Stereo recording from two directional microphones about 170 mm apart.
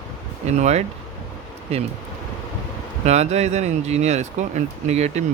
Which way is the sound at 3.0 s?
40° right (ahead or behind).